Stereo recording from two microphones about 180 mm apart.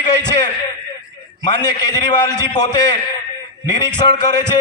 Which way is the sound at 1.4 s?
25° left (ahead or behind).